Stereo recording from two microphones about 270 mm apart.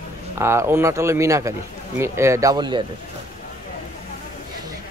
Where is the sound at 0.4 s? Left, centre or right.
Centre.